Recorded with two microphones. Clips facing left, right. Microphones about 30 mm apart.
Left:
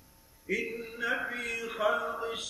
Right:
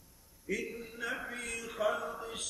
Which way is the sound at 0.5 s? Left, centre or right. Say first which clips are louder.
Left 4 dB; left.